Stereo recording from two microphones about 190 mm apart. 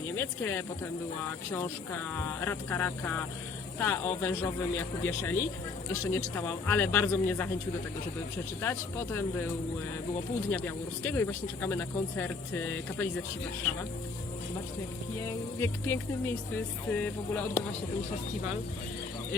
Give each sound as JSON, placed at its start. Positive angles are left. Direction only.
{"t": 0.2, "sound": "speech", "side_deg": 15}
{"t": 8.6, "sound": "speech", "side_deg": 15}
{"t": 11.0, "sound": "speech", "side_deg": 15}
{"t": 15.2, "sound": "speech", "side_deg": 15}